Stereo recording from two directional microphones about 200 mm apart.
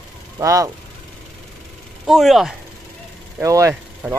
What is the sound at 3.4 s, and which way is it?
Speech, 15° right (ahead or behind).